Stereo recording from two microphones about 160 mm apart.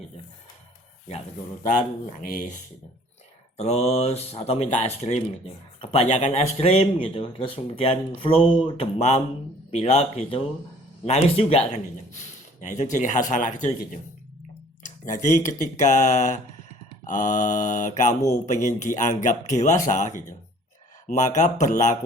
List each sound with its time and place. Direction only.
1.6 s speech: 55° left (ahead or behind)
3.6 s speech: 40° left (ahead or behind)